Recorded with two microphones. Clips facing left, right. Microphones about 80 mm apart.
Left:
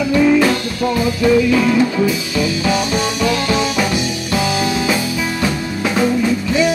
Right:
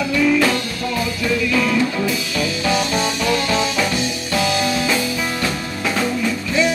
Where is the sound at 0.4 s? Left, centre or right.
Centre.